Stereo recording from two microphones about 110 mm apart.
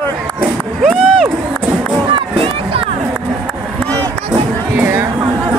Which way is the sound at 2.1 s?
55° right (ahead or behind).